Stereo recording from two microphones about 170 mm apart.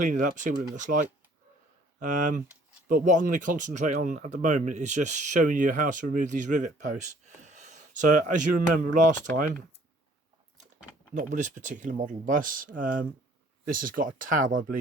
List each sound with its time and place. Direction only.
0.0 s speech: 50° right (ahead or behind)
7.4 s a sound: 45° right (ahead or behind)
8.9 s speech: 50° right (ahead or behind)
11.1 s speech: 45° right (ahead or behind)